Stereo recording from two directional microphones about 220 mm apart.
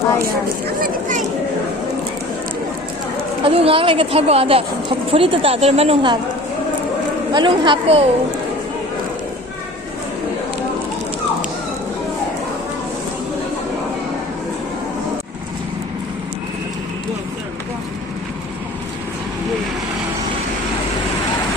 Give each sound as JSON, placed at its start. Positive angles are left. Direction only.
{"t": 0.2, "sound": "speech", "side_deg": -45}
{"t": 3.4, "sound": "a woman's voice", "side_deg": -25}
{"t": 7.3, "sound": "a woman's voice", "side_deg": -20}